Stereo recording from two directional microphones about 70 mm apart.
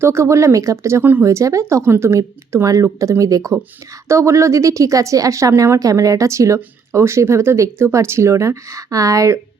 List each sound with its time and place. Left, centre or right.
0.0 s speech: right